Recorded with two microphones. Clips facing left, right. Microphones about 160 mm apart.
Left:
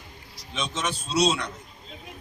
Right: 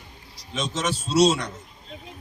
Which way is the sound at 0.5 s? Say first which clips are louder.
Right 3 dB; 45° right (ahead or behind).